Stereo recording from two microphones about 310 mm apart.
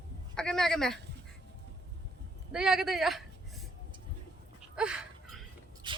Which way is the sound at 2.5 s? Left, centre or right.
Centre.